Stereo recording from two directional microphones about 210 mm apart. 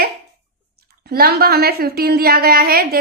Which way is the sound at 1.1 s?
45° right (ahead or behind).